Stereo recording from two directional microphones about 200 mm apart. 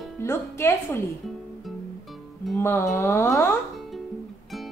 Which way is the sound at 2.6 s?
15° left (ahead or behind).